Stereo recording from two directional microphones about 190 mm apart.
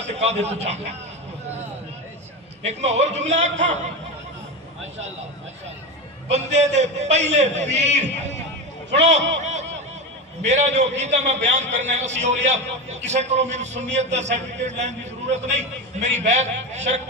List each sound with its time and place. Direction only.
0.0 s a man's voice: 35° right (ahead or behind)
2.6 s a man's voice: 35° right (ahead or behind)
6.2 s a man's voice: 35° right (ahead or behind)
8.9 s a man's voice: 65° right (ahead or behind)
9.4 s snicker: 35° right (ahead or behind)
10.4 s a man's voice: 35° right (ahead or behind)